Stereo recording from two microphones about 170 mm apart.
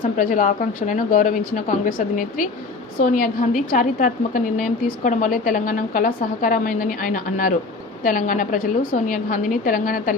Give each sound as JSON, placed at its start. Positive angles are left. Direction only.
{"t": 0.2, "sound": "a woman's voice", "side_deg": 50}